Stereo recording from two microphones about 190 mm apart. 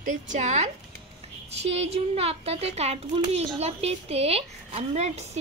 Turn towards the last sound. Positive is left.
turn(degrees=-35)  # may be behind; listen again after turning